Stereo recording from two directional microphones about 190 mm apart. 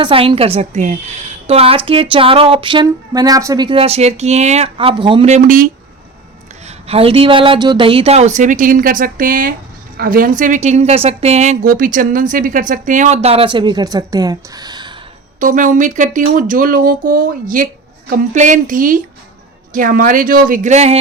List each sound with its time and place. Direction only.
0.0 s a woman's voice: 30° right (ahead or behind)
6.7 s a woman's voice: 30° right (ahead or behind)
15.4 s speech: 45° right (ahead or behind)